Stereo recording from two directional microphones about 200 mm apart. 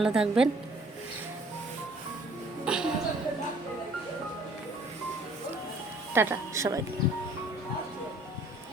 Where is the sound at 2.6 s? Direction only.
5° right (ahead or behind).